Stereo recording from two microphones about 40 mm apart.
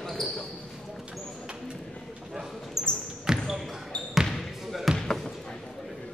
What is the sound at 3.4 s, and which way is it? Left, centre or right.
Basketball bounce, centre.